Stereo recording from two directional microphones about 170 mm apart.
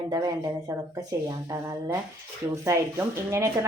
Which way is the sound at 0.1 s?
20° right (ahead or behind).